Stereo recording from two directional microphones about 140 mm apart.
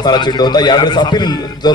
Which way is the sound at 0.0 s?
30° left (ahead or behind).